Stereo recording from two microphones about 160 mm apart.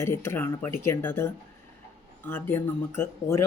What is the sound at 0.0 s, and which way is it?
Speech, 15° left (ahead or behind).